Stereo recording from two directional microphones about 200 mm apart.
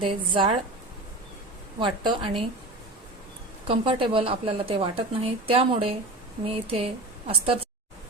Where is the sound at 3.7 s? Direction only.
25° right (ahead or behind).